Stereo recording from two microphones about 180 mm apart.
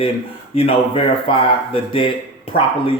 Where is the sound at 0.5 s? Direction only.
30° left (ahead or behind).